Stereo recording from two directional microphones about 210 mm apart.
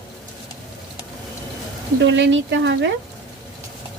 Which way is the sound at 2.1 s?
60° right (ahead or behind).